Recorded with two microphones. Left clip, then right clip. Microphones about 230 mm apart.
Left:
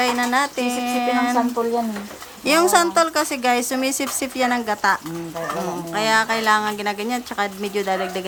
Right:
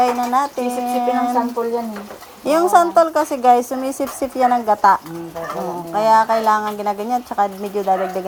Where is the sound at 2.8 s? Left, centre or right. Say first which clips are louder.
Right 4 dB; left.